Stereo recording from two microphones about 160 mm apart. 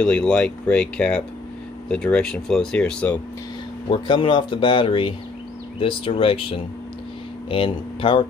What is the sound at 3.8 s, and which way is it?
Speech, 30° left (ahead or behind).